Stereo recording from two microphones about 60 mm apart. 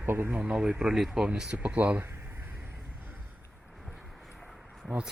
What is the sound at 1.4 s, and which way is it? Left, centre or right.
Speech, centre.